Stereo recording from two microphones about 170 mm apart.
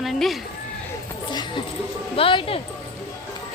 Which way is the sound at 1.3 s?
25° left (ahead or behind).